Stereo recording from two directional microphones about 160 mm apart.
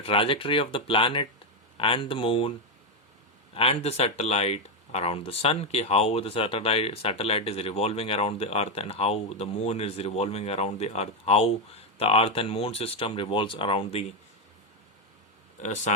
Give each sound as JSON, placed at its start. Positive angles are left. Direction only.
{"t": 0.0, "sound": "speech", "side_deg": 35}
{"t": 3.5, "sound": "speech", "side_deg": 35}
{"t": 15.6, "sound": "speech", "side_deg": 45}